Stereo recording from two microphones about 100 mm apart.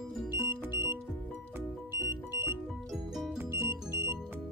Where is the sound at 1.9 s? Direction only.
25° right (ahead or behind).